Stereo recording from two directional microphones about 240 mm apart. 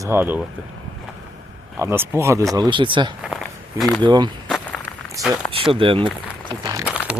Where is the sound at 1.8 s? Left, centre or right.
Centre.